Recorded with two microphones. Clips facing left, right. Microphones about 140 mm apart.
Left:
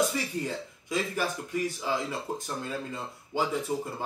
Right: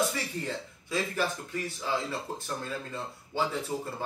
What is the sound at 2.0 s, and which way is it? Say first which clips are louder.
Speech: left 1 dB; 15° left (ahead or behind).